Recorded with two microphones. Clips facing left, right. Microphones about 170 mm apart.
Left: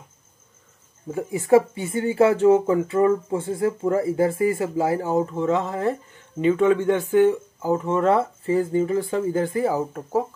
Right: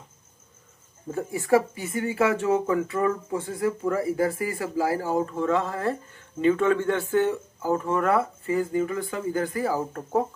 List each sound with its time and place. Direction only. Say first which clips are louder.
1.1 s speech: left 4 dB; 20° left (ahead or behind)